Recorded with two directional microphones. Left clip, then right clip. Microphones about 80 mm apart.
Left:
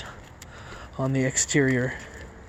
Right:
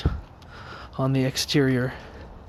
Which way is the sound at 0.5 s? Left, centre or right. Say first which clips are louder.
Right 2 dB; right.